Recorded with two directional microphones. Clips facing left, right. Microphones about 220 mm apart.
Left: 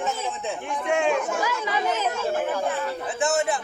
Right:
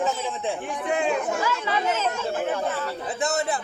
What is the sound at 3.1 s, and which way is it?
Speech, 35° right (ahead or behind).